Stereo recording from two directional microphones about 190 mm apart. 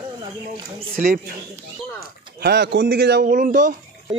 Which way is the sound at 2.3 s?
60° right (ahead or behind).